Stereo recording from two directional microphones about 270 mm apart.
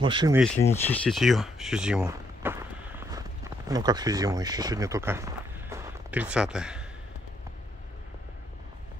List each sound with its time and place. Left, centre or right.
0.0 s speech: centre
0.4 s speech: centre
2.0 s walk: centre